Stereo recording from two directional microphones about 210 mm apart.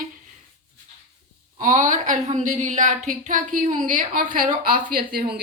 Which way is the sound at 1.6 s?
40° right (ahead or behind).